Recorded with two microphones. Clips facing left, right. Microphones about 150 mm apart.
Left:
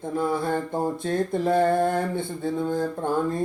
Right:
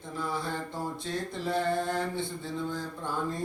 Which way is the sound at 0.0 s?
50° left (ahead or behind).